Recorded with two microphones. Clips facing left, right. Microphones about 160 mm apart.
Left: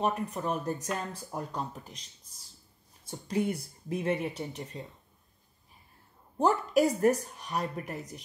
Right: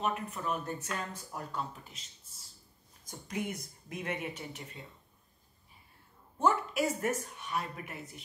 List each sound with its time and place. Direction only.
0.0 s speech: 35° left (ahead or behind)
3.1 s speech: 35° left (ahead or behind)
6.3 s speech: 35° left (ahead or behind)